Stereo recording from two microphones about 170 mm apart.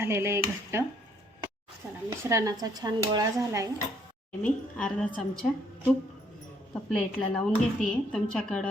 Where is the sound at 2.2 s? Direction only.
15° right (ahead or behind).